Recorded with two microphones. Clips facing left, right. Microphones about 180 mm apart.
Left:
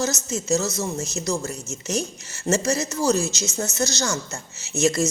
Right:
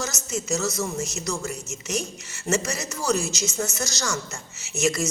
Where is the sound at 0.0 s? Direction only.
25° left (ahead or behind).